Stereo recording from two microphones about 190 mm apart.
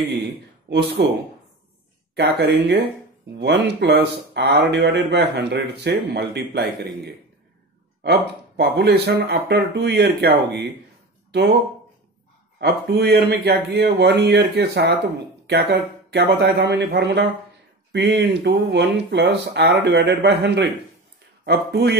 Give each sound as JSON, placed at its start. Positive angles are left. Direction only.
{"t": 0.7, "sound": "speech", "side_deg": -60}
{"t": 2.1, "sound": "speech", "side_deg": -60}
{"t": 8.0, "sound": "speech", "side_deg": -60}
{"t": 12.5, "sound": "speech", "side_deg": -60}